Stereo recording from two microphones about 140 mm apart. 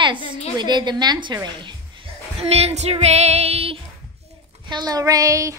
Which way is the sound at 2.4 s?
50° right (ahead or behind).